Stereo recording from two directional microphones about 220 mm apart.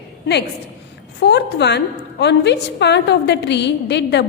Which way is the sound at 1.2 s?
50° left (ahead or behind).